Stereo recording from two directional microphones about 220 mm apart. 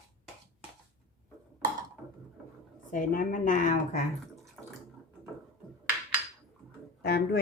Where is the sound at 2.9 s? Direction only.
35° left (ahead or behind).